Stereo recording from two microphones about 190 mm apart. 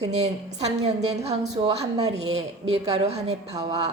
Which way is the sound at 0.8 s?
35° right (ahead or behind).